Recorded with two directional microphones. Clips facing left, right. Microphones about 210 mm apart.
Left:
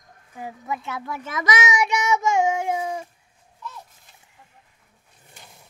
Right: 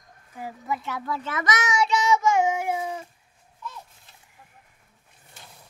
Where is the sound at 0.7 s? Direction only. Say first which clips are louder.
Right 1 dB; 15° left (ahead or behind).